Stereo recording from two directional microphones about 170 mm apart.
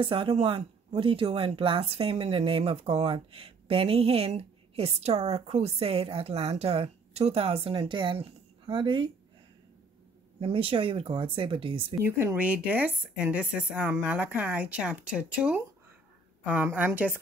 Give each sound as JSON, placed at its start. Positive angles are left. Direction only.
{"t": 0.0, "sound": "a woman's voice", "side_deg": -30}
{"t": 10.4, "sound": "a woman's voice", "side_deg": -30}
{"t": 12.0, "sound": "a woman's voice", "side_deg": -15}